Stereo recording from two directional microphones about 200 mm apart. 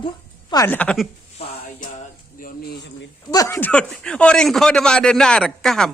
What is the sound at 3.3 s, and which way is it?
A man's voice, 15° left (ahead or behind).